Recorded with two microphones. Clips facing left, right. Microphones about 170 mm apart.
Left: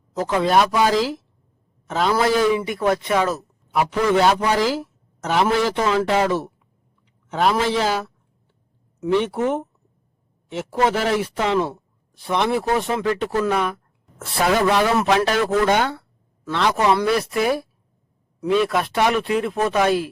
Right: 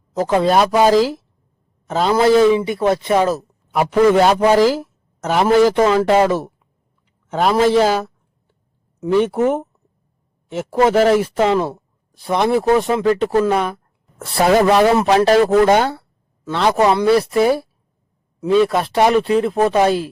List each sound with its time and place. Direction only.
0.2 s speech: 35° right (ahead or behind)
3.8 s speech: 45° right (ahead or behind)